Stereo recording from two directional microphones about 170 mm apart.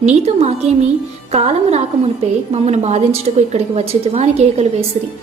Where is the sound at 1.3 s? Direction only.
40° right (ahead or behind).